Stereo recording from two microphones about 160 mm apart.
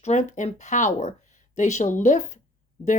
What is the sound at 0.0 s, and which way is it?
A woman's voice, 45° left (ahead or behind).